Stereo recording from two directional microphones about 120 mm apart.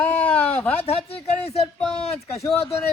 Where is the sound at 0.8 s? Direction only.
55° left (ahead or behind).